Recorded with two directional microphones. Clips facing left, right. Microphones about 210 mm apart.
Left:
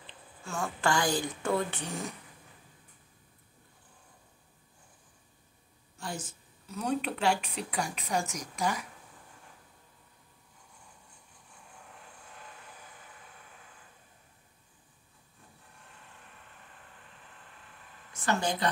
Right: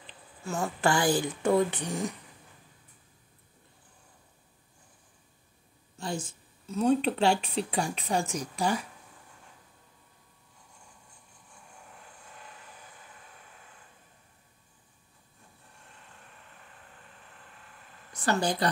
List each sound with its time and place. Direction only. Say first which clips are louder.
0.4 s speech: right 4 dB; 20° right (ahead or behind)
5.9 s a sound: right 5 dB; 25° right (ahead or behind)
6.7 s speech: right 7 dB; 25° right (ahead or behind)
18.1 s speech: right 2 dB; 35° right (ahead or behind)